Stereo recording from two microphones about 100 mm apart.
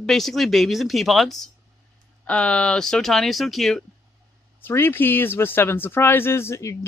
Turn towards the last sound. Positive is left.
turn(degrees=30)  # may be behind; listen again after turning